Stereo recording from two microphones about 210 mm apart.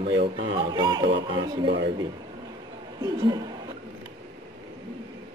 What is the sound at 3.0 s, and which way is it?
Speech, 20° right (ahead or behind).